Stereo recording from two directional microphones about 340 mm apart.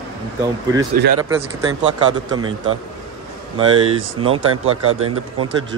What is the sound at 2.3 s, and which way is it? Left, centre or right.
Speech, centre.